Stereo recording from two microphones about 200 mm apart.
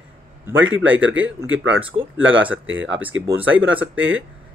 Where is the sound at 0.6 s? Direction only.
75° right (ahead or behind).